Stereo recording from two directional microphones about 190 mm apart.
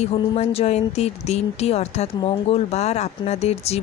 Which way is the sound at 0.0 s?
30° left (ahead or behind).